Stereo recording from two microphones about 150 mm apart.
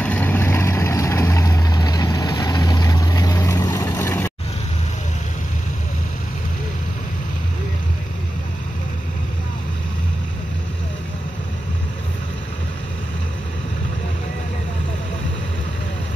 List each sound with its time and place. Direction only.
0.0 s vehicle: 10° left (ahead or behind)